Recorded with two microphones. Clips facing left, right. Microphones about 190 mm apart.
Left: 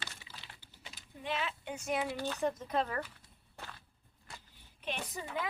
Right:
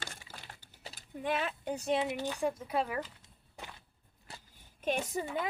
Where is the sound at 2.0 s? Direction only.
20° right (ahead or behind).